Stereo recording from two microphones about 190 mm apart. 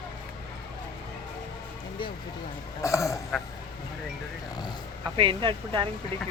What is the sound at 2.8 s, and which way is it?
Speech, 15° left (ahead or behind).